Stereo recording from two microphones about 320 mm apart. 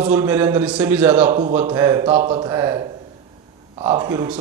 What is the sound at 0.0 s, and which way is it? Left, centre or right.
A man's voice, centre.